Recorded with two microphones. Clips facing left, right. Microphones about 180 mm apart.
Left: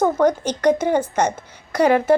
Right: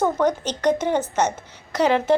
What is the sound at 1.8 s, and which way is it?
Speech, 55° left (ahead or behind).